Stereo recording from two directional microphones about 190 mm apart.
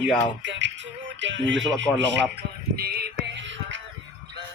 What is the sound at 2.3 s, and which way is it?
Music, 55° right (ahead or behind).